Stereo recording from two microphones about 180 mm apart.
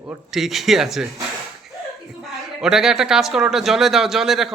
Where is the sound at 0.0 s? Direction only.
5° right (ahead or behind).